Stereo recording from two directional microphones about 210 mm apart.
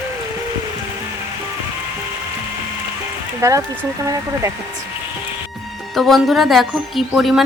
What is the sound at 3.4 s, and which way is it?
Speech, 10° right (ahead or behind).